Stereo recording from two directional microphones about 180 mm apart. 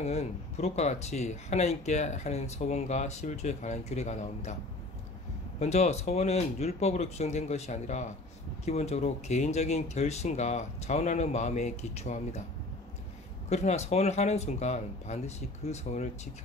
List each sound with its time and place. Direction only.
0.0 s speech: 35° left (ahead or behind)
5.6 s speech: 40° left (ahead or behind)
13.5 s speech: 40° left (ahead or behind)